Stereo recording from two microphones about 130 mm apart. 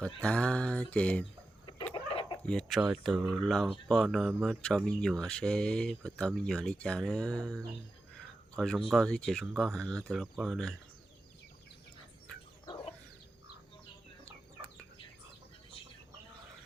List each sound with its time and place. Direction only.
0.0 s a sound: 10° left (ahead or behind)
1.9 s chicken: 40° left (ahead or behind)
2.4 s speech: 5° left (ahead or behind)
12.6 s bird: 40° left (ahead or behind)